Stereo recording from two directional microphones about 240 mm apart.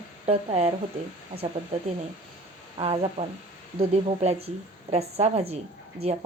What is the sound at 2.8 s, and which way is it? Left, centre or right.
A woman's voice, right.